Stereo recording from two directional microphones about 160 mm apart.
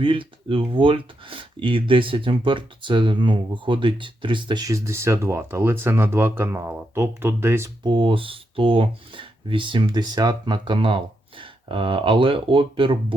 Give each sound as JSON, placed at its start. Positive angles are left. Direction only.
{"t": 0.0, "sound": "speech", "side_deg": -35}
{"t": 7.9, "sound": "speech", "side_deg": -30}